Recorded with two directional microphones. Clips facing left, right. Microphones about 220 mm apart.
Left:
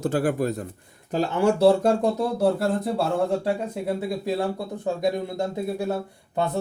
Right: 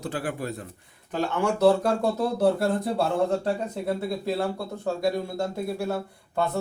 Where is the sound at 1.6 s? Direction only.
30° left (ahead or behind).